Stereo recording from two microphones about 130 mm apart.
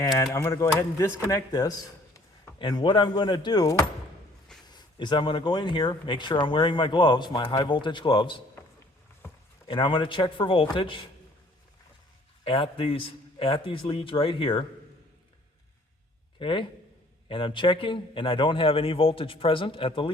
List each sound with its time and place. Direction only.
0.0 s speech: 25° left (ahead or behind)
9.6 s speech: 40° left (ahead or behind)
12.5 s speech: 45° left (ahead or behind)
16.4 s speech: 40° left (ahead or behind)